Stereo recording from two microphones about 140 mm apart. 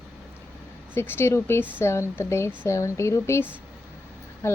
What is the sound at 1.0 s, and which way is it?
Speech, 15° left (ahead or behind).